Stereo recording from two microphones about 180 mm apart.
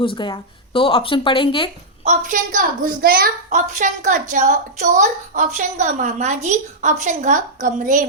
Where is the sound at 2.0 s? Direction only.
45° right (ahead or behind).